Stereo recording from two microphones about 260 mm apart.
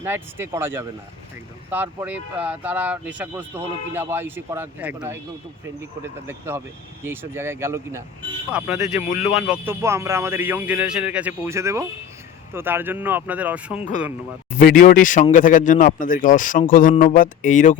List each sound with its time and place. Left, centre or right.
0.0 s a man's voice: centre
9.0 s speech: left
9.4 s a man's voice: centre
14.5 s speech: left